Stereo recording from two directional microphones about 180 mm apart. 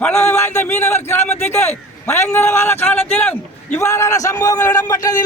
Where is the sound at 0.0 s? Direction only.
15° left (ahead or behind).